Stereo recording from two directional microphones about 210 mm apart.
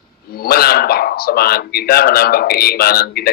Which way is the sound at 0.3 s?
45° left (ahead or behind).